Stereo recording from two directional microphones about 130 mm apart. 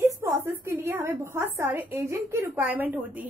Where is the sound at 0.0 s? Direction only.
20° right (ahead or behind).